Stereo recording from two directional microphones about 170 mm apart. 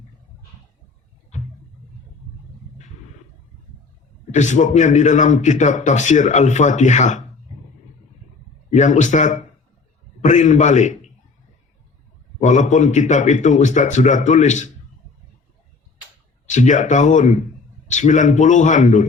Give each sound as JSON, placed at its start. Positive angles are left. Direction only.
{"t": 1.3, "sound": "a sound", "side_deg": 45}
{"t": 4.4, "sound": "a man's voice", "side_deg": 45}
{"t": 8.7, "sound": "a man's voice", "side_deg": 45}
{"t": 12.4, "sound": "a man's voice", "side_deg": 45}
{"t": 16.5, "sound": "a man's voice", "side_deg": 45}